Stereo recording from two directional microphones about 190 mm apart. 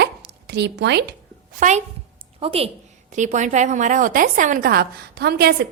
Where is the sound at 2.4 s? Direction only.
30° right (ahead or behind).